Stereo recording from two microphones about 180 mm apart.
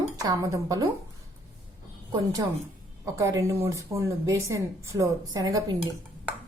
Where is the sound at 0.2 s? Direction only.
20° right (ahead or behind).